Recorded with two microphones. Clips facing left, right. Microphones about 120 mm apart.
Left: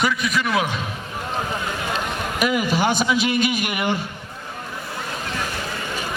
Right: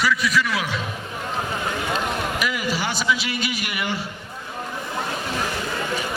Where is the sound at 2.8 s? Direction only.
50° left (ahead or behind).